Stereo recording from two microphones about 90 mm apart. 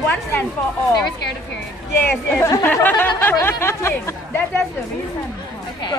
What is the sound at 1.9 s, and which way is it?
Speech, 20° left (ahead or behind).